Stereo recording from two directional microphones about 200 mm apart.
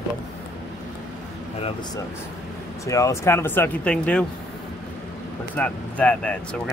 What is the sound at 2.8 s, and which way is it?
Speech, 15° left (ahead or behind).